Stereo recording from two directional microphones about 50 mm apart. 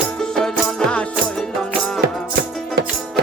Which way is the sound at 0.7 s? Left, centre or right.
Left.